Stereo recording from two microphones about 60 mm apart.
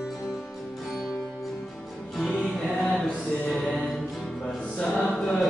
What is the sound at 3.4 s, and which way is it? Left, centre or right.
Music, left.